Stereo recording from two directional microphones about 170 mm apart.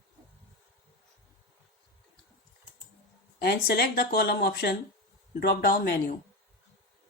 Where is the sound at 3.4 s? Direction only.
70° left (ahead or behind).